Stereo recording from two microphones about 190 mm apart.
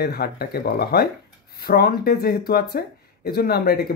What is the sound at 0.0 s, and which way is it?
Speech, 55° left (ahead or behind).